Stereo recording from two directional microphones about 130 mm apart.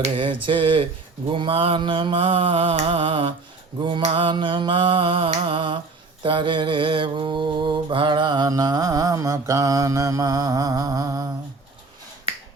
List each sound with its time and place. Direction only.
0.2 s mantra: 40° right (ahead or behind)